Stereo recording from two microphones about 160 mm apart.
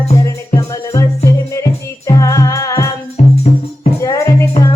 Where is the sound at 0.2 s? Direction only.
20° left (ahead or behind).